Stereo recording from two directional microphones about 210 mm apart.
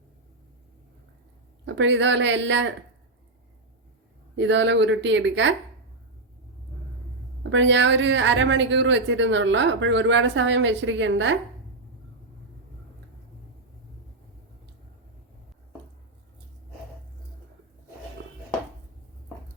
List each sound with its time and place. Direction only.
1.6 s speech: 60° right (ahead or behind)
4.4 s speech: 60° right (ahead or behind)
7.5 s speech: 60° right (ahead or behind)